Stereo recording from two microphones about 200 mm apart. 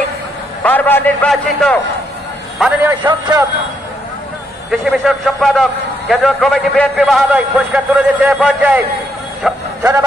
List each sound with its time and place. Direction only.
0.7 s a man's voice: 10° left (ahead or behind)
2.6 s a man's voice: 10° right (ahead or behind)
3.0 s speech: 20° right (ahead or behind)
4.6 s a man's voice: centre (ahead or behind)